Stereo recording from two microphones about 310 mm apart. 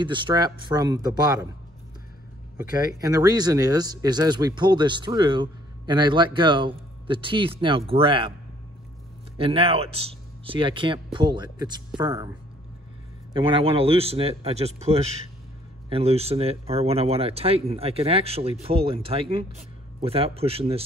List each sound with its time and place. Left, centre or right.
0.0 s speech: centre
3.0 s speech: centre
9.4 s speech: centre
13.3 s speech: centre